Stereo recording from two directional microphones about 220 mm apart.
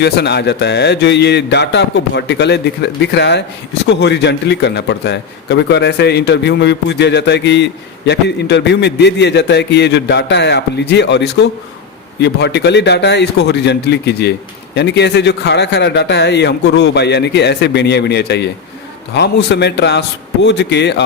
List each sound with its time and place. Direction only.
0.0 s a man's voice: 50° left (ahead or behind)